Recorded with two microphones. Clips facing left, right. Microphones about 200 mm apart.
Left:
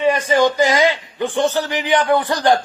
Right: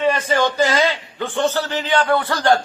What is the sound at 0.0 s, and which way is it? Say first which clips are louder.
A man's voice: left 3 dB; 15° left (ahead or behind).